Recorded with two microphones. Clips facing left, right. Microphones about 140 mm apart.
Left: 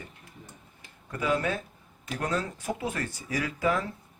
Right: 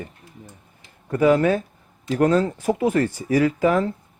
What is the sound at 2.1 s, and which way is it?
Speech, 80° right.